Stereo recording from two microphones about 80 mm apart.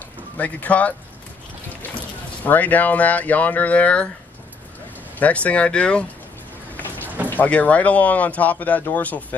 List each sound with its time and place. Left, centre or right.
0.4 s speech: centre
2.4 s speech: left
5.2 s speech: centre
7.2 s speech: centre